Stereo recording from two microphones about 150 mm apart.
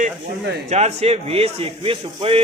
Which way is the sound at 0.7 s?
45° right (ahead or behind).